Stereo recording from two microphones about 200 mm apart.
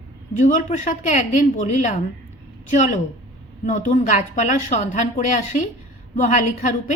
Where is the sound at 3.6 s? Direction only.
40° left (ahead or behind).